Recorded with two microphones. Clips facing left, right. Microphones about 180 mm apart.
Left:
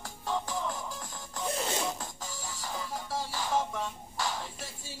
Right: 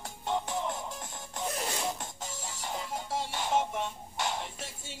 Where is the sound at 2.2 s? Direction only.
25° right (ahead or behind).